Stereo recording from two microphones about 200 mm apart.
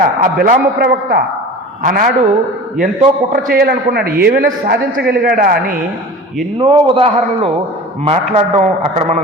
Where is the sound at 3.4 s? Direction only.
50° right (ahead or behind).